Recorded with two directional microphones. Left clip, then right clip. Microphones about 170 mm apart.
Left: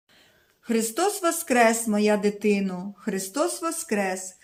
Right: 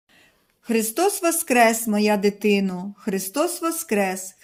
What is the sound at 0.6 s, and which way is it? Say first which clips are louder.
Speech: right 3 dB; 30° right (ahead or behind).